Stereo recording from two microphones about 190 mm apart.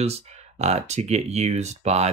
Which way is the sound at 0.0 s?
35° right (ahead or behind).